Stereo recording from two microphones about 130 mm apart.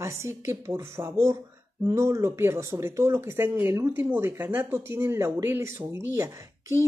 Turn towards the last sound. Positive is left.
turn(degrees=-20)  # may be behind; listen again after turning